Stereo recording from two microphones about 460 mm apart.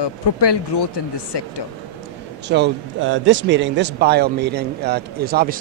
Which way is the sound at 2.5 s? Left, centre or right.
Right.